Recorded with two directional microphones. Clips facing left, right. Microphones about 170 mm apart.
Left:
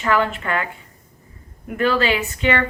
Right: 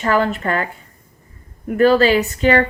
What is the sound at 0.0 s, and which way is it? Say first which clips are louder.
A woman's voice: right 3 dB; 40° right (ahead or behind).